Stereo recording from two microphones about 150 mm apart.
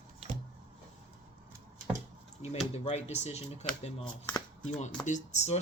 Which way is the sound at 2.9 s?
45° left (ahead or behind).